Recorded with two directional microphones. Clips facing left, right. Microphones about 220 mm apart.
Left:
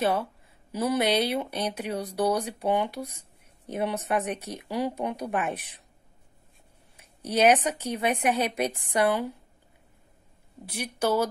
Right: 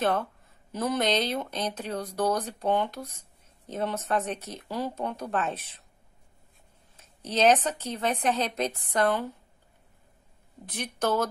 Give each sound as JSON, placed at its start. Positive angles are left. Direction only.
{"t": 0.0, "sound": "speech", "side_deg": 10}
{"t": 7.0, "sound": "speech", "side_deg": 10}
{"t": 10.6, "sound": "speech", "side_deg": 10}